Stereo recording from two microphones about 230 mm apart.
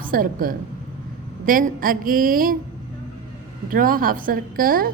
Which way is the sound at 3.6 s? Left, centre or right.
Right.